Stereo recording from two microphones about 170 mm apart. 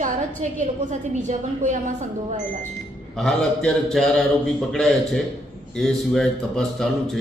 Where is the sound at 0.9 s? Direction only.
45° right (ahead or behind).